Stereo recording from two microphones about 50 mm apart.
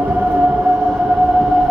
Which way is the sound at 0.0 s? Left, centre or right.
Right.